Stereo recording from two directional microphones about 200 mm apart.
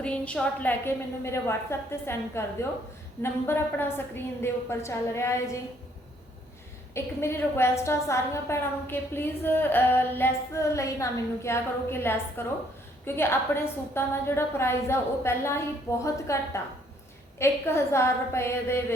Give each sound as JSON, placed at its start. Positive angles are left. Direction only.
{"t": 0.0, "sound": "a woman's voice", "side_deg": 5}
{"t": 6.9, "sound": "a woman's voice", "side_deg": 10}